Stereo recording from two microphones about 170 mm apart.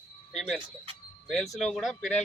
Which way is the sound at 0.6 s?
30° right (ahead or behind).